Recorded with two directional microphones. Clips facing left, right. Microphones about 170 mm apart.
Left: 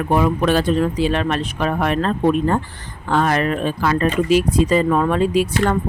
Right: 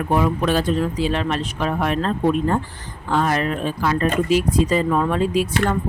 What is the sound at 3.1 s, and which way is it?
Speech, 65° left (ahead or behind).